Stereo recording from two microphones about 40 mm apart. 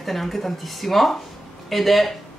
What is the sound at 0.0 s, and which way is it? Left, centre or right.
Speech, centre.